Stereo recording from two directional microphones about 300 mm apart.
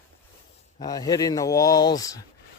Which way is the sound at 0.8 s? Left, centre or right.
Centre.